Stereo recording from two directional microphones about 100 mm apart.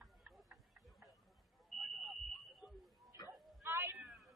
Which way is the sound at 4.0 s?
Centre (ahead or behind).